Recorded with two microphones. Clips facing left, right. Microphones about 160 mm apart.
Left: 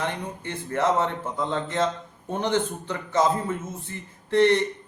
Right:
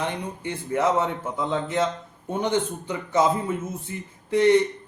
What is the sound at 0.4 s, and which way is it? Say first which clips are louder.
A man's voice: right 1 dB; 10° right (ahead or behind).